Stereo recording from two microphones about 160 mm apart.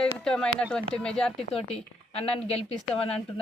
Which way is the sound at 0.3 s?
5° left (ahead or behind).